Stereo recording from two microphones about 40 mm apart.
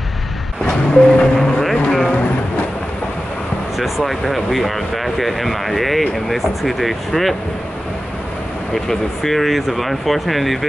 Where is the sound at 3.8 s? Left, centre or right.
Centre.